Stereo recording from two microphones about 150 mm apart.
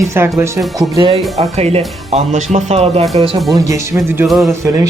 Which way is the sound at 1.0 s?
40° right (ahead or behind).